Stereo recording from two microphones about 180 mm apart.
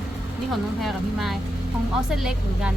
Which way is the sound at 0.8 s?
Centre (ahead or behind).